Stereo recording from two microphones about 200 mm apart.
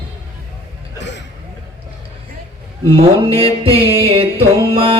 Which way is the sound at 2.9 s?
30° right (ahead or behind).